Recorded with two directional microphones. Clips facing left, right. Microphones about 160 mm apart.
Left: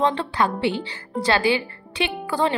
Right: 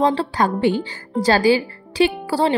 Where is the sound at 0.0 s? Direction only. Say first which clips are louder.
Right 3 dB; 35° right (ahead or behind).